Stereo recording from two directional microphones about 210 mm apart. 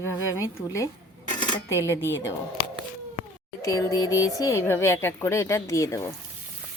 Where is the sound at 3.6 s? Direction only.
15° left (ahead or behind).